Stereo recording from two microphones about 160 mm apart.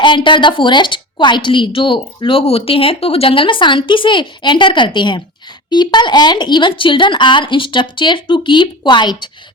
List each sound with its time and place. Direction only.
0.0 s a woman's voice: 30° left (ahead or behind)